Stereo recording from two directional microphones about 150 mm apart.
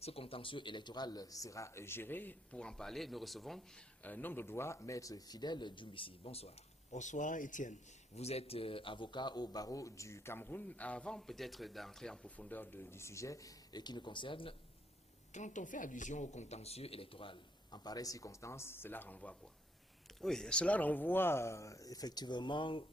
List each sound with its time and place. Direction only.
0.0 s a man's voice: 40° left (ahead or behind); by 3.6 s centre (ahead or behind)
4.0 s a man's voice: 10° left (ahead or behind); by 6.5 s 40° left (ahead or behind)
6.9 s a man's voice: 55° left (ahead or behind); by 14.5 s 35° left (ahead or behind)
15.3 s a man's voice: 55° left (ahead or behind); by 22.9 s 35° left (ahead or behind)